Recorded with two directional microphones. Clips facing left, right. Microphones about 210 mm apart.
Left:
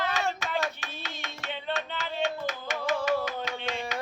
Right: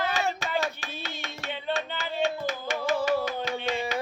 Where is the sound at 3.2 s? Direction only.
30° right (ahead or behind).